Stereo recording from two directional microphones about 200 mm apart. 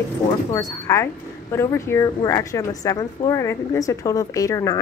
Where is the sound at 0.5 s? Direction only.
15° left (ahead or behind).